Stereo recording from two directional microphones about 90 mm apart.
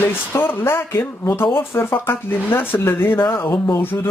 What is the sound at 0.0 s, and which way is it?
Speech, 25° left (ahead or behind).